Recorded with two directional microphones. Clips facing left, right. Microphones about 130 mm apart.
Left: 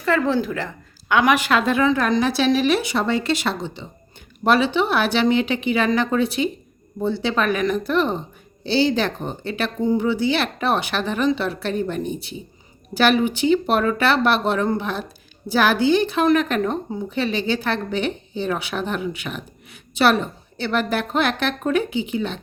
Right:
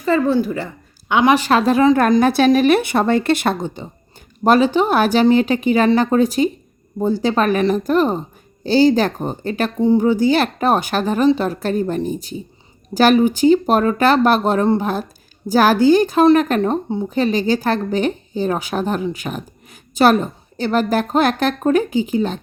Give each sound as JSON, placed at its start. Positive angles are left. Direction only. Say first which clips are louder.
{"t": 0.4, "sound": "a woman's voice", "louder": "right 3 dB", "side_deg": 90}
{"t": 1.0, "sound": "a woman's voice", "louder": "right 3 dB", "side_deg": -25}
{"t": 2.0, "sound": "a woman's voice", "louder": "right 6 dB", "side_deg": -50}